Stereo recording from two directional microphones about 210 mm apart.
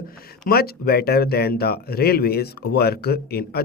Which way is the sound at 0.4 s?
45° left (ahead or behind).